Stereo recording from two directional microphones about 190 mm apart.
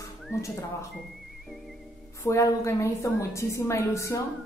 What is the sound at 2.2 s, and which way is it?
A woman's voice, 15° left (ahead or behind).